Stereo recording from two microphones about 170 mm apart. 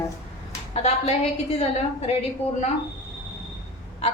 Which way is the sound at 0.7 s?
40° left (ahead or behind).